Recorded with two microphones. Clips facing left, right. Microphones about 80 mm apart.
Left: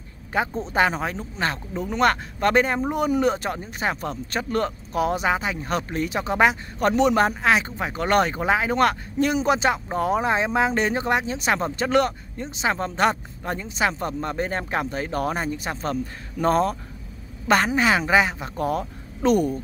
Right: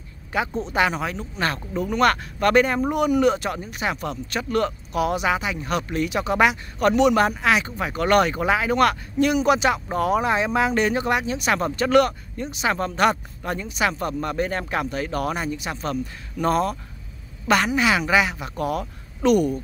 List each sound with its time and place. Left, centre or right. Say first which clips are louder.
0.5 s speech: right 2 dB; centre
0.7 s speech: left 1 dB; left